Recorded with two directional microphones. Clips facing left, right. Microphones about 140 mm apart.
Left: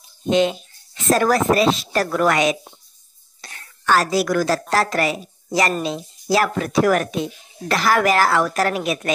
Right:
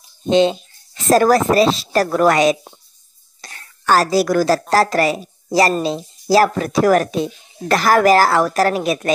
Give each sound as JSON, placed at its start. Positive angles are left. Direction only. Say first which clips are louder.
{"t": 0.3, "sound": "a woman's voice", "louder": "right 4 dB", "side_deg": -30}